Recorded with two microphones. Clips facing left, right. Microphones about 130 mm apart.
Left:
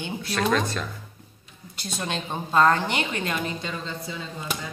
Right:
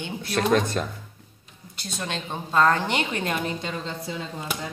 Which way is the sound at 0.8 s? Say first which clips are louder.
Right 4 dB; 40° right (ahead or behind).